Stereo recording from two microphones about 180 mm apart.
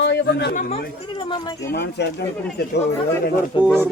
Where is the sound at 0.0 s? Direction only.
70° left (ahead or behind).